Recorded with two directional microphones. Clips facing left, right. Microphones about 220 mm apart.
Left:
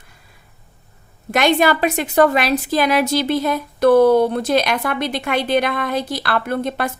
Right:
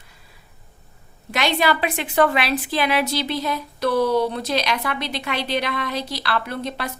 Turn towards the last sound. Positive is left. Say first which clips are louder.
# left 6 dB
turn(degrees=50)  # may be behind; listen again after turning